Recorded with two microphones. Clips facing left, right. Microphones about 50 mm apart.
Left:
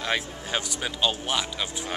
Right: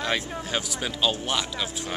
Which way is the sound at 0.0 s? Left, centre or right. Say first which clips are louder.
Right 1 dB; centre.